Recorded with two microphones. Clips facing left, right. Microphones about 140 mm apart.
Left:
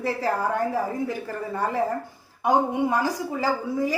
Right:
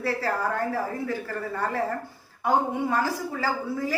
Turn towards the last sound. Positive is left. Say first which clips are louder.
# left 3 dB
turn(degrees=15)  # may be behind; listen again after turning